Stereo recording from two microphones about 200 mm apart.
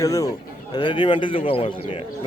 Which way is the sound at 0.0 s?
15° left (ahead or behind).